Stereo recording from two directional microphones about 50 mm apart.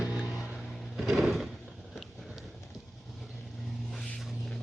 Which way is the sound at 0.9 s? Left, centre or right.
Centre.